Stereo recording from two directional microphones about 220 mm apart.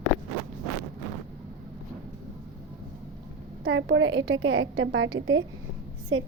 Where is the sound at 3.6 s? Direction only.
55° right (ahead or behind).